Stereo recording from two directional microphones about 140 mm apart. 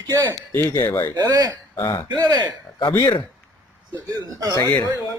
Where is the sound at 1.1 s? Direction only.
30° right (ahead or behind).